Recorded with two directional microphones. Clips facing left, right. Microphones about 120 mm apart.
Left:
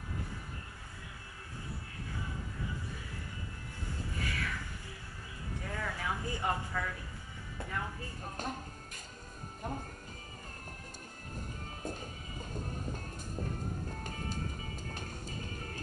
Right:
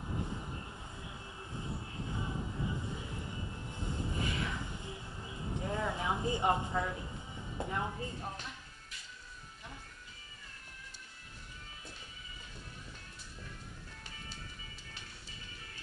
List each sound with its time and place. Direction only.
0.0 s vehicle: 20° right (ahead or behind)
5.4 s a sound: 20° right (ahead or behind)
11.3 s music: 45° left (ahead or behind)